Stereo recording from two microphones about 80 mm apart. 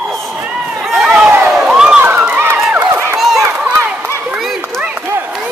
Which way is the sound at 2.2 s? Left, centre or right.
Right.